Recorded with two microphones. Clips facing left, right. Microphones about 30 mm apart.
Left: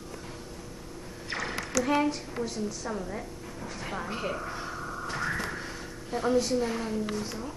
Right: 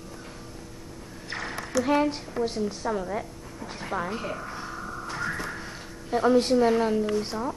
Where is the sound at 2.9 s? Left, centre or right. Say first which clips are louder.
Right 6 dB; centre.